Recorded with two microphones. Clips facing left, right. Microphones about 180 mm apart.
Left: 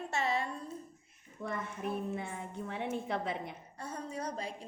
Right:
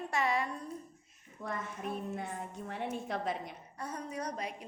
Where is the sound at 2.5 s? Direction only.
60° left (ahead or behind).